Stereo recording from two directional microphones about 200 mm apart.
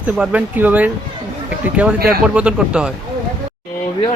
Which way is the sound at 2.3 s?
5° right (ahead or behind).